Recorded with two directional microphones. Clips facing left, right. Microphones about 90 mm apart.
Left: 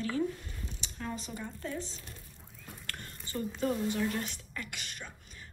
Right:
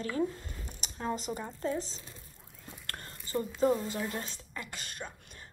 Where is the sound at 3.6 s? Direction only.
25° right (ahead or behind).